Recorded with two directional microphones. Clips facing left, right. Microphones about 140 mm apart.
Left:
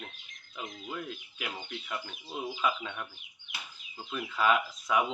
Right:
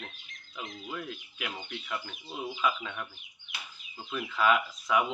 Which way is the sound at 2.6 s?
25° left (ahead or behind).